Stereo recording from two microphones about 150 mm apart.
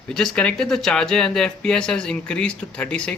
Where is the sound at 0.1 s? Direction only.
5° left (ahead or behind).